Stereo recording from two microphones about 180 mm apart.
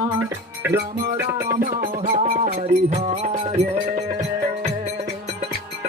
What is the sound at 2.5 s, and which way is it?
Music, 40° right (ahead or behind).